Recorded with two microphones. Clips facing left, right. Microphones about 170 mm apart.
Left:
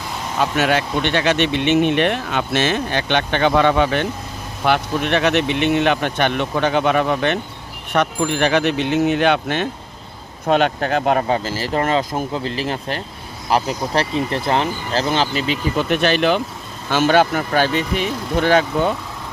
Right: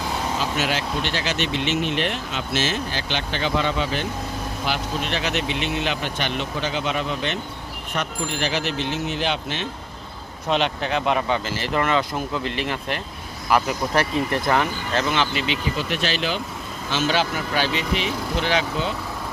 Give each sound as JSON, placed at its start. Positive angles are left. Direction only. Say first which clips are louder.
{"t": 0.3, "sound": "speech", "louder": "left 10 dB", "side_deg": 60}
{"t": 10.4, "sound": "speech", "louder": "left 6 dB", "side_deg": 50}
{"t": 15.7, "sound": "speech", "louder": "left 8 dB", "side_deg": 55}